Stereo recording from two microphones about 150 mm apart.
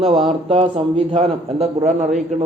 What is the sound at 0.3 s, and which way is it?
A man's voice, 40° right (ahead or behind).